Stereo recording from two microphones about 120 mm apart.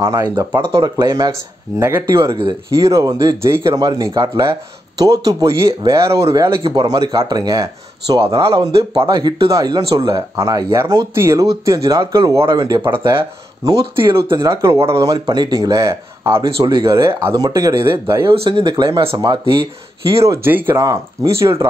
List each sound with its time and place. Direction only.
0.0 s speech: 25° right (ahead or behind)
6.6 s speech: 35° right (ahead or behind)
8.3 s speech: 45° right (ahead or behind)
12.9 s speech: 20° right (ahead or behind)
15.0 s speech: 40° right (ahead or behind); by 18.3 s 25° right (ahead or behind)
18.3 s speech: 50° right (ahead or behind)
20.2 s speech: 20° right (ahead or behind)
20.8 s speech: 30° right (ahead or behind)